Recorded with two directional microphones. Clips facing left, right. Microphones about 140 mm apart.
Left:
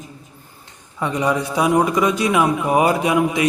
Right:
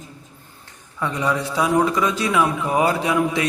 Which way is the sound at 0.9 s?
20° left (ahead or behind).